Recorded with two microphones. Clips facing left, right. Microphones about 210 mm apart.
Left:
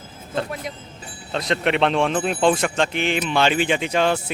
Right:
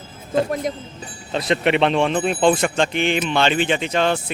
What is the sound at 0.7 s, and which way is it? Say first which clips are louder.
Speech: right 8 dB; 45° right (ahead or behind).